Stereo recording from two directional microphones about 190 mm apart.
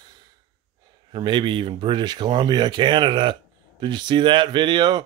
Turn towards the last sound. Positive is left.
turn(degrees=-25)  # may be behind; listen again after turning